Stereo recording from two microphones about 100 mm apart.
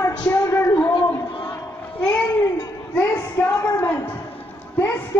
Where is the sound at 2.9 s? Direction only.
20° left (ahead or behind).